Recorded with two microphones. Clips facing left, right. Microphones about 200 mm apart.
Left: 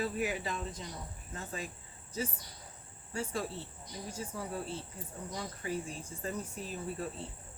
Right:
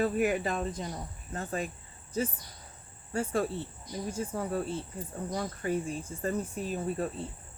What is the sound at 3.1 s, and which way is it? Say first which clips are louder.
Speech: right 7 dB; 55° right (ahead or behind).